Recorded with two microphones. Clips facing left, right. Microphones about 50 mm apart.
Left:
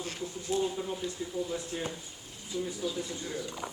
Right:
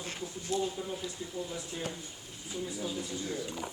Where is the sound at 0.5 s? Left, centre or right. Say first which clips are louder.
Left 2 dB; left.